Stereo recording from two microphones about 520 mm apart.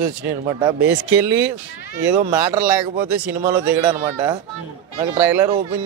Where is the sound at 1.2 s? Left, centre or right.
Right.